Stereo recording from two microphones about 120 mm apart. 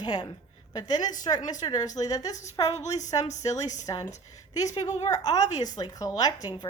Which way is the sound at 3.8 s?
30° left (ahead or behind).